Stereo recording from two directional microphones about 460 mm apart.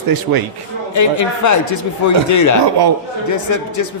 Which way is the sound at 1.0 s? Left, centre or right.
Left.